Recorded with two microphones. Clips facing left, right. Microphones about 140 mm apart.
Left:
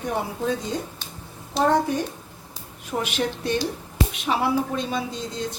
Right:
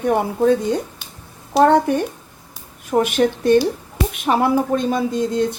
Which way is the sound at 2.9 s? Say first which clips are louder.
Right 9 dB; 50° right (ahead or behind).